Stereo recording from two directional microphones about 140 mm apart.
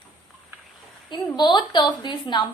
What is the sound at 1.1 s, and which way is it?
A woman's voice, 30° left (ahead or behind).